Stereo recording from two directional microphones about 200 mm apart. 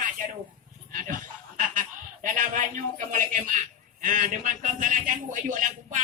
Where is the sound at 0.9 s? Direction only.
40° right (ahead or behind).